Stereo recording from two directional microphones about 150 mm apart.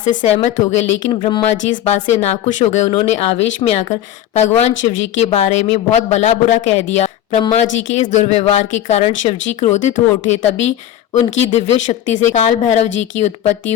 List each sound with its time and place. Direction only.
0.0 s speech: 60° left (ahead or behind)
1.2 s speech: 30° left (ahead or behind)
1.6 s speech: 55° left (ahead or behind)